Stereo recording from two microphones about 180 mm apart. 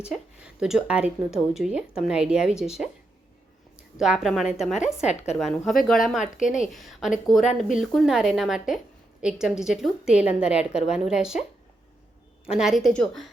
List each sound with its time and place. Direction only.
0.1 s a woman's voice: 5° right (ahead or behind)
12.5 s a woman's voice: centre (ahead or behind)